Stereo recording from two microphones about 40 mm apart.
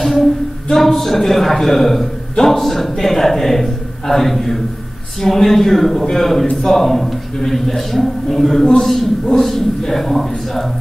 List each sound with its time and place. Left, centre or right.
0.2 s a woman's voice: centre